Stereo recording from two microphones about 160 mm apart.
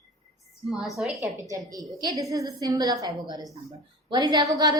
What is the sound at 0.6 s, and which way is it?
Speech, centre (ahead or behind).